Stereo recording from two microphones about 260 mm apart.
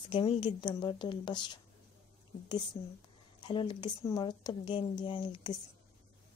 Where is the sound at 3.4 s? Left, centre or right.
Centre.